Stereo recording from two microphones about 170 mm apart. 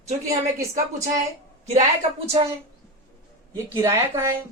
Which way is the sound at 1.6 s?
40° right (ahead or behind).